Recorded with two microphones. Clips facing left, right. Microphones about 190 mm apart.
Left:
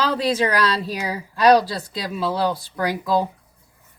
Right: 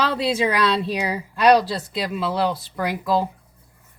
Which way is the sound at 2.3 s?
Centre (ahead or behind).